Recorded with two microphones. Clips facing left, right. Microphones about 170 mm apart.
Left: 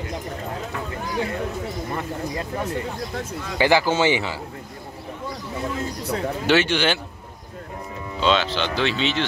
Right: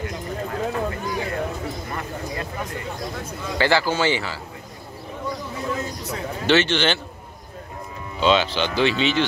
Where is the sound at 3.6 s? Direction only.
15° left (ahead or behind).